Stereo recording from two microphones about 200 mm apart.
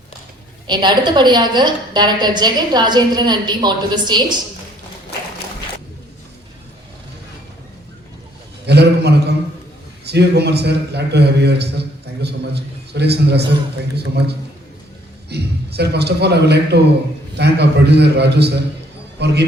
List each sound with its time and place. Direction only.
0.7 s a woman's voice: 20° right (ahead or behind)
8.6 s a man's voice: 55° right (ahead or behind)
15.3 s a man's voice: 55° right (ahead or behind)